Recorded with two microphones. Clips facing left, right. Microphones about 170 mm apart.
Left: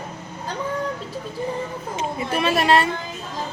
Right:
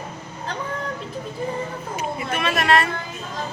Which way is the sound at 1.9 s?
25° left (ahead or behind).